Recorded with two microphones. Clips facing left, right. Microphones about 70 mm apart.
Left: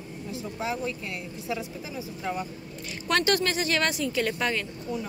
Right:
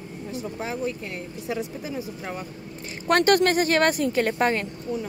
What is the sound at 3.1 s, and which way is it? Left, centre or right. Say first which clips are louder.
A woman's voice: right 6 dB; right.